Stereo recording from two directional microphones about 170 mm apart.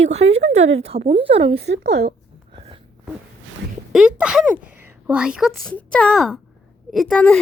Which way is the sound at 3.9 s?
5° right (ahead or behind).